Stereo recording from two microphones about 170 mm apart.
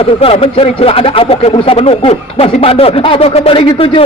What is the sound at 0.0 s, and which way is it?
Speech, 35° left (ahead or behind).